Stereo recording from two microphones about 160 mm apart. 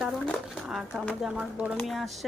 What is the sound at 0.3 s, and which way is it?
Speech, centre (ahead or behind).